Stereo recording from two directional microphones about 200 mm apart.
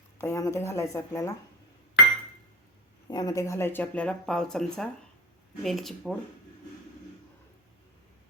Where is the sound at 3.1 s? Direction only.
20° left (ahead or behind); by 6.2 s centre (ahead or behind).